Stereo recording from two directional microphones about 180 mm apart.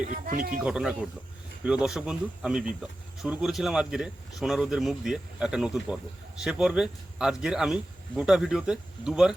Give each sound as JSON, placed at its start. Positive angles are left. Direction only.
{"t": 0.0, "sound": "speech", "side_deg": -45}
{"t": 0.6, "sound": "speech", "side_deg": -5}